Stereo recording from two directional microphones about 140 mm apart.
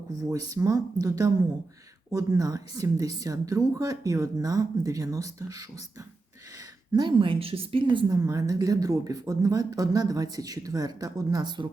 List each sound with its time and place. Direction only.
0.3 s a woman's voice: 25° right (ahead or behind)
6.9 s a woman's voice: 30° right (ahead or behind)